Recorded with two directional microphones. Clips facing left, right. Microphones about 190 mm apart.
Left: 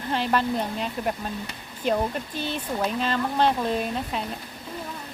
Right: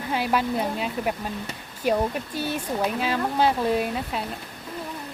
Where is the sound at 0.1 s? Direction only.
10° right (ahead or behind).